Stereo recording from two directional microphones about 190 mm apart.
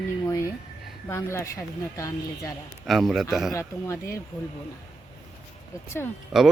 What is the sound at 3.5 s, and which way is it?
Speech, 15° left (ahead or behind).